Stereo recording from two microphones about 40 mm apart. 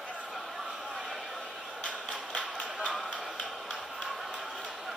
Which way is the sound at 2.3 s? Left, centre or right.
Centre.